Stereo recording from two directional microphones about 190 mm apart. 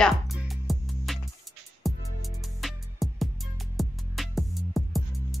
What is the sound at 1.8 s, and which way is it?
Music, centre (ahead or behind).